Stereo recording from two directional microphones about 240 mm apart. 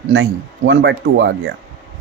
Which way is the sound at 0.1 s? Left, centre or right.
Right.